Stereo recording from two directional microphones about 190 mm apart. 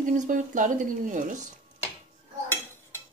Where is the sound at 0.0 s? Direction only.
45° right (ahead or behind).